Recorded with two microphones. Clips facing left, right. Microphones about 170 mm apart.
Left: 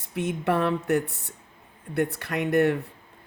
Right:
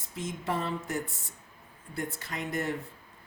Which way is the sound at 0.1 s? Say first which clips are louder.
Left 8 dB; 65° left (ahead or behind).